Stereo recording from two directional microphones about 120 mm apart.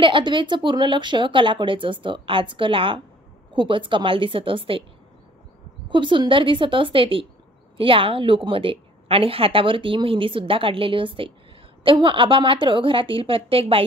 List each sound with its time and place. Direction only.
0.0 s a woman's voice: 45° right (ahead or behind)
5.9 s a woman's voice: 45° right (ahead or behind)